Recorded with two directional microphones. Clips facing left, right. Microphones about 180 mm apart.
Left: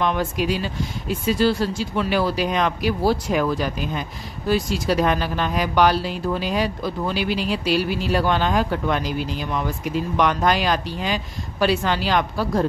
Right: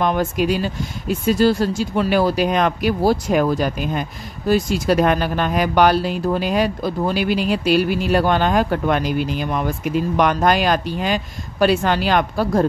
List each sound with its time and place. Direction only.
0.0 s speech: 45° right (ahead or behind)